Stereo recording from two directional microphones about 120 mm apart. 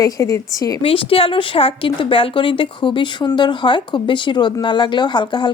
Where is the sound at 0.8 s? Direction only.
50° left (ahead or behind).